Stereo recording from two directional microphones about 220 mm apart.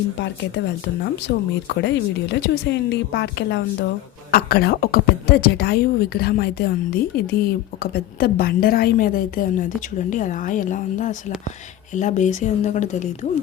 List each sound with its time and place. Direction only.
1.3 s a woman's voice: 50° left (ahead or behind); by 13.1 s 35° left (ahead or behind)